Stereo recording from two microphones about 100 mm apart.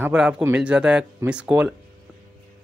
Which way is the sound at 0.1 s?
10° right (ahead or behind).